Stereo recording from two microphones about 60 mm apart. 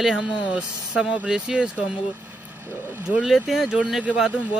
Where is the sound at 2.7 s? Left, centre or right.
Right.